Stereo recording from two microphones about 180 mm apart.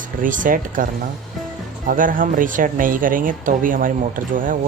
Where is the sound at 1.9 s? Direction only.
50° right (ahead or behind).